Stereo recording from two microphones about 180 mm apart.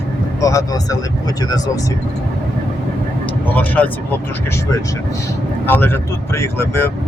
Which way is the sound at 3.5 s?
10° left (ahead or behind).